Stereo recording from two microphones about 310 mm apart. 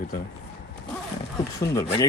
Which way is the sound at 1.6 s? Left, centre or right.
Centre.